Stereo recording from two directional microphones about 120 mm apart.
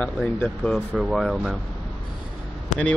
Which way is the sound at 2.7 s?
90° left.